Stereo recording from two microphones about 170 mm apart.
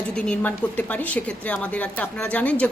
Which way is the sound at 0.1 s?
5° left (ahead or behind).